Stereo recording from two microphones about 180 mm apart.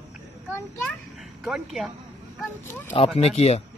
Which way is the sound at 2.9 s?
35° left (ahead or behind).